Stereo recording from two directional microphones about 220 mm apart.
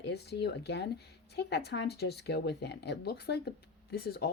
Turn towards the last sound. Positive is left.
turn(degrees=45)  # may be behind; listen again after turning